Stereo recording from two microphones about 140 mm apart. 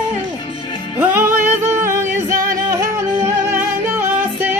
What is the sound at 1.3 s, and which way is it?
Music, 55° right (ahead or behind).